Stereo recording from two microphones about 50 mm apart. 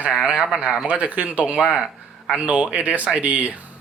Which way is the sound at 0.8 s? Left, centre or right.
Right.